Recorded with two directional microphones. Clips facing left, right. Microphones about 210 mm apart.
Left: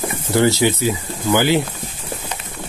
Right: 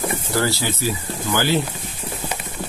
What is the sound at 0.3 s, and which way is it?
Speech, 20° left (ahead or behind).